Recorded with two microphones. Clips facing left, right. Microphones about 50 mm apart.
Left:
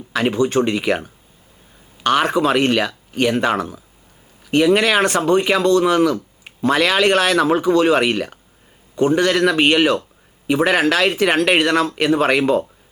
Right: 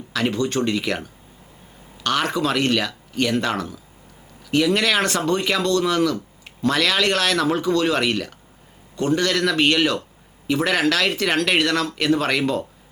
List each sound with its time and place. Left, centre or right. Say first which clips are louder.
0.1 s speech: left 5 dB; centre